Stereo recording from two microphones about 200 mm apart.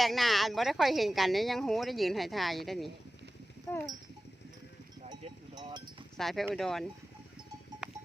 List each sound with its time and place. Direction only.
0.0 s speech: centre (ahead or behind)
5.5 s chink: 20° right (ahead or behind)
6.1 s speech: centre (ahead or behind)
7.8 s a sound: 5° right (ahead or behind)